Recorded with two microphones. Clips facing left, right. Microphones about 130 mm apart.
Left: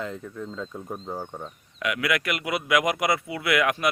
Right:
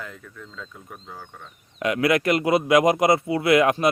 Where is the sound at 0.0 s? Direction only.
25° left (ahead or behind).